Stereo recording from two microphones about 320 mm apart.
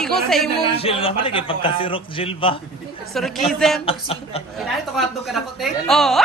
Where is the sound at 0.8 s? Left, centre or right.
Centre.